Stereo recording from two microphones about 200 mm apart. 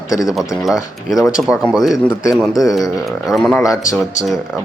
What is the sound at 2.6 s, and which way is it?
Speech, 15° left (ahead or behind).